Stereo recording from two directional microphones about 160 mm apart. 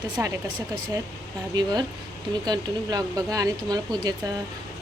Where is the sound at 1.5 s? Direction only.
25° right (ahead or behind).